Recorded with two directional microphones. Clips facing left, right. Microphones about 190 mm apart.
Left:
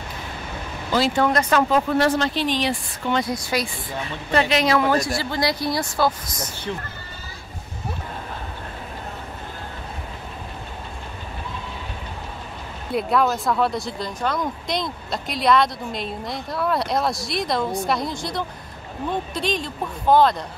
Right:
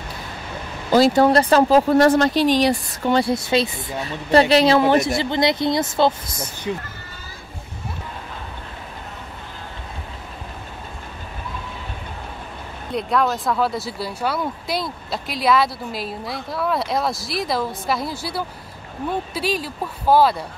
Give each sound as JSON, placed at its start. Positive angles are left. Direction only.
{"t": 0.9, "sound": "speech", "side_deg": -40}
{"t": 4.0, "sound": "speech", "side_deg": -35}
{"t": 6.7, "sound": "speech", "side_deg": -10}
{"t": 12.9, "sound": "speech", "side_deg": 0}